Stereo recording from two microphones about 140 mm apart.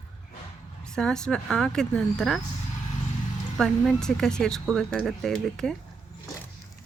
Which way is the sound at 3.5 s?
5° left (ahead or behind).